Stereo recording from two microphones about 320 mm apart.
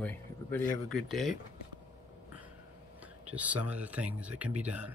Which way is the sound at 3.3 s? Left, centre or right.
Centre.